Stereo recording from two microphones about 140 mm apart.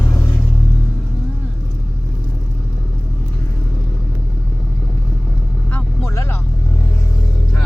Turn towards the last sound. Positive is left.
turn(degrees=20)  # may be behind; listen again after turning